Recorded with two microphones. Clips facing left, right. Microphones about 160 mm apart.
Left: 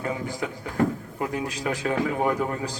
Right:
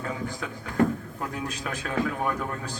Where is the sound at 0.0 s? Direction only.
20° left (ahead or behind).